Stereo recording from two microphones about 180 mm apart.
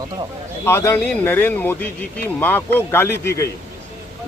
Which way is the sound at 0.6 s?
15° left (ahead or behind).